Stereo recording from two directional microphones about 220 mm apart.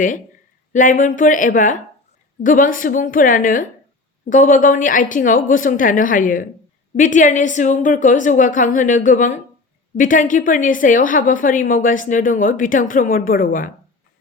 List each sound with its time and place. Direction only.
0.7 s a woman's voice: 35° left (ahead or behind)